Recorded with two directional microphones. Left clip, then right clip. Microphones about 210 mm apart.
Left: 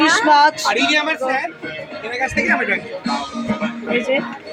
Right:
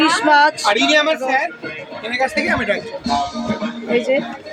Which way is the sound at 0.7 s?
35° right (ahead or behind).